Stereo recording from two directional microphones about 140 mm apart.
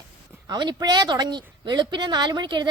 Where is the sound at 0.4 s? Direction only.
30° right (ahead or behind).